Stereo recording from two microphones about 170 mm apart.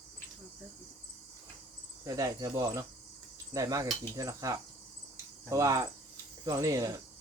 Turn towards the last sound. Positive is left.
turn(degrees=-20)  # may be behind; listen again after turning